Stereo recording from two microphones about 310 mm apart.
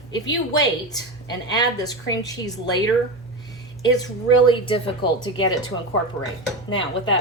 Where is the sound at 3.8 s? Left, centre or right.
Centre.